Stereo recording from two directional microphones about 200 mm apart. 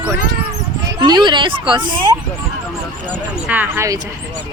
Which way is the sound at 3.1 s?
10° right (ahead or behind).